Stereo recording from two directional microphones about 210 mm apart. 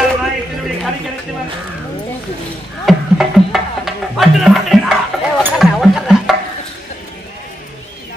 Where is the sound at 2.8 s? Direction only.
Centre (ahead or behind).